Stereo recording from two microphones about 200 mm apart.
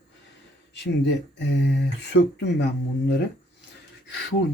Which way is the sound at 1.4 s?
60° left (ahead or behind).